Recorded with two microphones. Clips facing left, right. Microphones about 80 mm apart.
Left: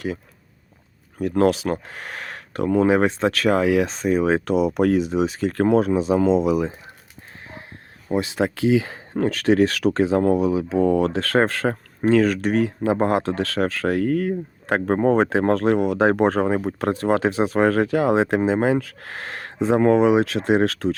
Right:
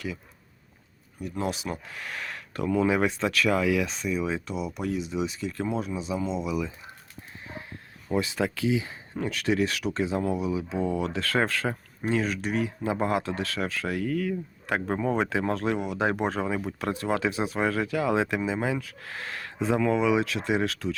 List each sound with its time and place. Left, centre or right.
1.2 s speech: left
1.9 s speech: left
4.4 s speech: left
5.5 s speech: left
6.3 s speech: left
8.1 s speech: left
8.7 s speech: left
9.1 s speech: left
12.9 s speech: left
18.1 s speech: left
18.3 s speech: left
20.1 s speech: left